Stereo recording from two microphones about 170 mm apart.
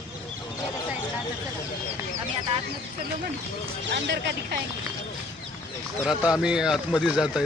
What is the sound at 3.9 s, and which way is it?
Speech, 90° right.